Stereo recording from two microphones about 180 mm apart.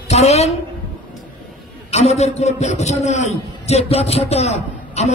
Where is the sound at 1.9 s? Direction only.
40° left (ahead or behind).